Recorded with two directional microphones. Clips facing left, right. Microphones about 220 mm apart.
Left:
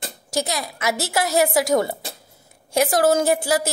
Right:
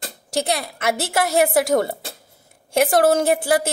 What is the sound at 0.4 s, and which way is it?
A woman's voice, 55° right (ahead or behind).